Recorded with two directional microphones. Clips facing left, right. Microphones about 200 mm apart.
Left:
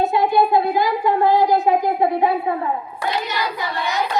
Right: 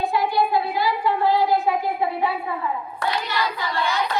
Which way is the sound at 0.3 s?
45° left (ahead or behind).